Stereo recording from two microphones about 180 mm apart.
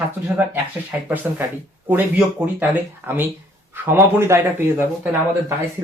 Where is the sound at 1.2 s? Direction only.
10° right (ahead or behind).